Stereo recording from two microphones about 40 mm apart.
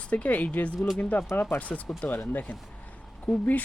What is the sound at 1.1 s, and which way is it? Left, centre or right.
Speech, left.